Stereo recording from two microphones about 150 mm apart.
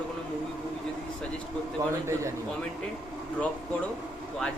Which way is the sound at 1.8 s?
20° right (ahead or behind).